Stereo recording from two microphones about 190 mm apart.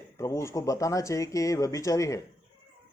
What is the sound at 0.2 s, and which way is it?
Speech, 15° left (ahead or behind).